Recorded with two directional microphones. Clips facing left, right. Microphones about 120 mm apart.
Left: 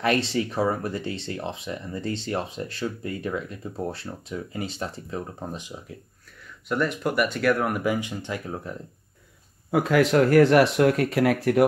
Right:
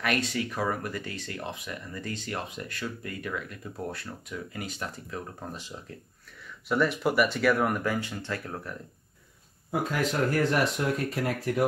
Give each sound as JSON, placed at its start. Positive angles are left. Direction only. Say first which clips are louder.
{"t": 0.0, "sound": "speech", "louder": "left 5 dB", "side_deg": 30}
{"t": 6.7, "sound": "speech", "louder": "even", "side_deg": 0}
{"t": 7.8, "sound": "speech", "louder": "left 4 dB", "side_deg": 15}
{"t": 9.7, "sound": "speech", "louder": "left 8 dB", "side_deg": 90}